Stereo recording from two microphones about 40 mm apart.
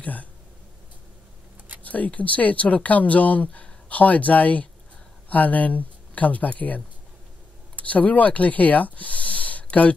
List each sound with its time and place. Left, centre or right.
0.0 s speech: left
1.8 s speech: left